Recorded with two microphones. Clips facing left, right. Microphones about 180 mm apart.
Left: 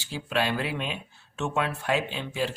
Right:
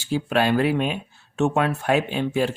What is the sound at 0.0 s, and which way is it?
Speech, 50° right (ahead or behind).